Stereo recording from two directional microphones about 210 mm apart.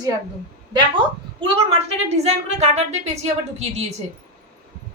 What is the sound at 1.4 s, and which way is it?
A woman's voice, 30° right (ahead or behind).